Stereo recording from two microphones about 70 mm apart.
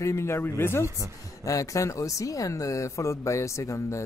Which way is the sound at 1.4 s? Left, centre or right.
Left.